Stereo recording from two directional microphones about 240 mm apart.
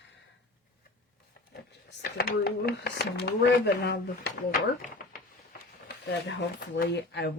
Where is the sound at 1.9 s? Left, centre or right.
Left.